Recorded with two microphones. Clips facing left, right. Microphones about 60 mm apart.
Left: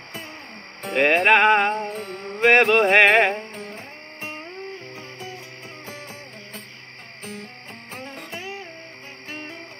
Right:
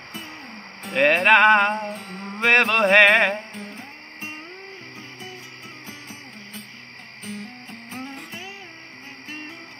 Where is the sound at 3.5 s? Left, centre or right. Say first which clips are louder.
Left 1 dB; left.